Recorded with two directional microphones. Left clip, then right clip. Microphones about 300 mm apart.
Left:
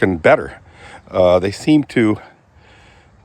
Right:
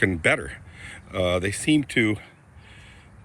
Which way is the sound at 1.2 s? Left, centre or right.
Left.